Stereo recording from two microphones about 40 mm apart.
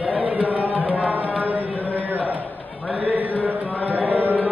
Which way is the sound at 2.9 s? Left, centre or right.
Right.